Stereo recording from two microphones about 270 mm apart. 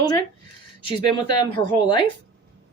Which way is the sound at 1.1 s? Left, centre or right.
Centre.